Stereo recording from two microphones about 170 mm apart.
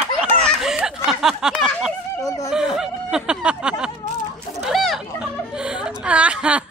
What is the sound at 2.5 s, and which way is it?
Snicker, 5° right (ahead or behind).